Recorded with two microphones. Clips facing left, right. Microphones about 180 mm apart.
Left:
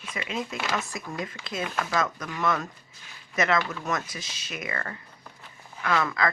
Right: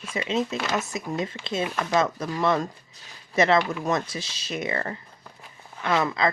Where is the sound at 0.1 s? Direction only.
25° right (ahead or behind).